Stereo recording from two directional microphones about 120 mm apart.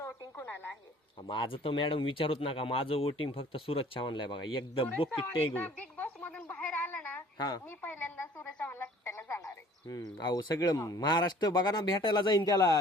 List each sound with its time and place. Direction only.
0.0 s a sound: 20° left (ahead or behind)
1.3 s speech: 45° left (ahead or behind)
5.5 s a sound: 15° left (ahead or behind)
7.3 s a child's voice: 35° left (ahead or behind)
7.8 s frog: 15° left (ahead or behind)
9.9 s speech: 35° left (ahead or behind)